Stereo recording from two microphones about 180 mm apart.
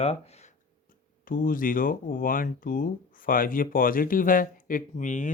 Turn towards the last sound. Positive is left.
turn(degrees=45)  # may be behind; listen again after turning